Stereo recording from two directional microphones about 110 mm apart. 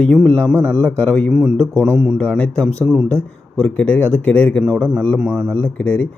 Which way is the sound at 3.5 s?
10° left (ahead or behind).